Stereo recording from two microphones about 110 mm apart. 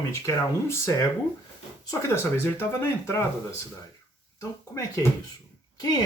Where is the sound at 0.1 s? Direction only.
30° left (ahead or behind).